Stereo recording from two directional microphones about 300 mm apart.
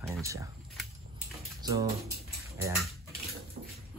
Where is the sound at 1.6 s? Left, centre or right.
Centre.